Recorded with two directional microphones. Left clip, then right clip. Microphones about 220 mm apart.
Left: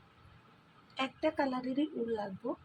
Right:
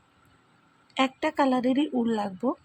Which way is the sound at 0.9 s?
35° right (ahead or behind).